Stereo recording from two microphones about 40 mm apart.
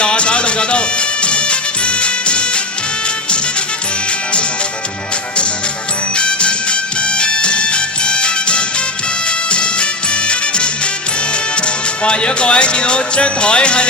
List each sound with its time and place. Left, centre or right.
0.0 s music: left
6.1 s music: left
11.5 s speech: left